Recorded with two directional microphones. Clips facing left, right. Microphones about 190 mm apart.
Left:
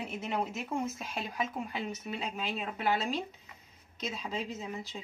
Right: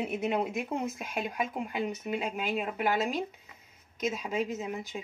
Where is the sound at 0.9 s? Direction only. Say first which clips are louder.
Right 3 dB; 55° right (ahead or behind).